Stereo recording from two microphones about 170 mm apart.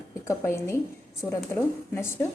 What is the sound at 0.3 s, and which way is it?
A woman's voice, 15° left (ahead or behind).